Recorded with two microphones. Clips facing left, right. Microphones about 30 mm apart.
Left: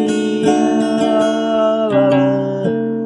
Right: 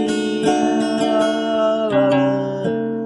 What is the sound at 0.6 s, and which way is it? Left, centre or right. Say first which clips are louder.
Music: left 3 dB; right.